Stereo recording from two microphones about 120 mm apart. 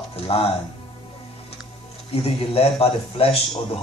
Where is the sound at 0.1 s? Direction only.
55° left (ahead or behind).